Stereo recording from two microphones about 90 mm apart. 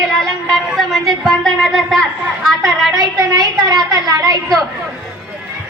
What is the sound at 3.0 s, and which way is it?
A woman's voice, 50° right (ahead or behind).